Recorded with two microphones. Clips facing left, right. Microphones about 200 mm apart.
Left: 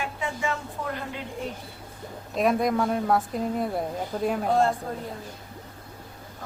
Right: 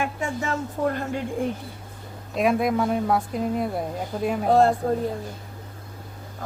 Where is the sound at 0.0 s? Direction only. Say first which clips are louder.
Right 3 dB; 45° right (ahead or behind).